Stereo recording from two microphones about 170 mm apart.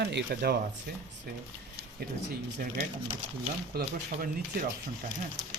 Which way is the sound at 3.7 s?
60° right (ahead or behind).